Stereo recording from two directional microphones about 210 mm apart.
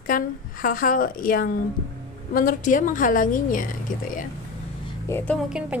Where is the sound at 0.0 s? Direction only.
40° left (ahead or behind).